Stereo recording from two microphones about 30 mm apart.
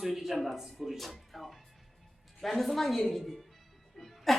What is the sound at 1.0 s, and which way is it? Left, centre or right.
Music, centre.